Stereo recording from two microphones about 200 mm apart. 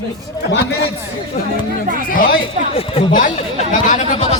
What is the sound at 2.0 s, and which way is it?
A man's voice, 45° left (ahead or behind).